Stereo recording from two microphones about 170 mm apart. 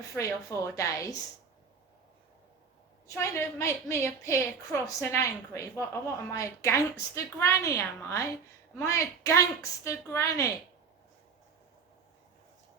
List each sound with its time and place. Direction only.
0.0 s speech: 20° left (ahead or behind)
3.1 s a woman's voice: 15° left (ahead or behind)